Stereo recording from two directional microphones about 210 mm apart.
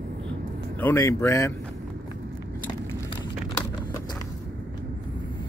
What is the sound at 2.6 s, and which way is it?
Vehicle, 20° left (ahead or behind).